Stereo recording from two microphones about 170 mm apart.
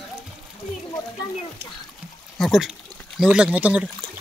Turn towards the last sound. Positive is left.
turn(degrees=-5)  # may be behind; listen again after turning